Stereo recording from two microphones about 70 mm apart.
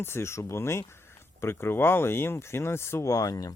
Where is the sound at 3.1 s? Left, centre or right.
Left.